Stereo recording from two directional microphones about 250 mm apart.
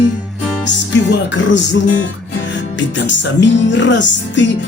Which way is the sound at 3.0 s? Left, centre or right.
Left.